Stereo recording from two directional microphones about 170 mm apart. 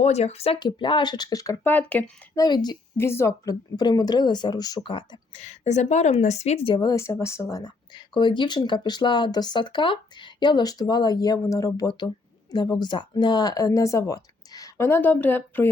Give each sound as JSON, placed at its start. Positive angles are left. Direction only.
{"t": 0.0, "sound": "speech", "side_deg": 40}
{"t": 2.3, "sound": "speech", "side_deg": 25}
{"t": 3.0, "sound": "speech", "side_deg": 15}
{"t": 6.7, "sound": "speech", "side_deg": 20}